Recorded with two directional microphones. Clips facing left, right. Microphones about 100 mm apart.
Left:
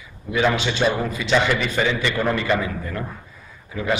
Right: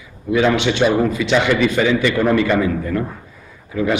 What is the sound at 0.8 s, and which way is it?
Speech, 15° right (ahead or behind).